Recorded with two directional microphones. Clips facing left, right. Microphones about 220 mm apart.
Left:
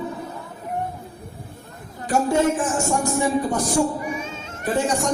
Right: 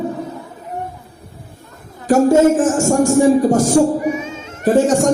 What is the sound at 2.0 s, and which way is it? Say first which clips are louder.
A man's voice: right 9 dB; 45° right (ahead or behind).